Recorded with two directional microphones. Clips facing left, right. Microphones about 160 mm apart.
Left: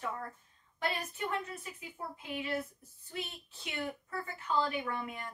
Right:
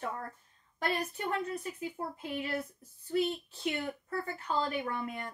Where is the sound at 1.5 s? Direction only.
45° right (ahead or behind).